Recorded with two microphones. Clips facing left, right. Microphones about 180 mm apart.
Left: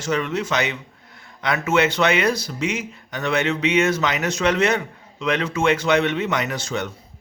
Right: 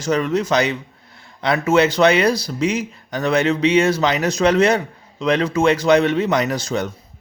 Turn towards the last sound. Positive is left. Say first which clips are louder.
# right 5 dB
turn(degrees=-35)  # may be behind; listen again after turning